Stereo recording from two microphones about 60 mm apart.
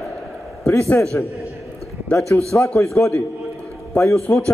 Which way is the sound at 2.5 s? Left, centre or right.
Centre.